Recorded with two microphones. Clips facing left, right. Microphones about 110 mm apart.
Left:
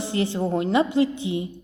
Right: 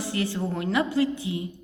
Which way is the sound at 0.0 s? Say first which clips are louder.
Left 4 dB; 25° left (ahead or behind).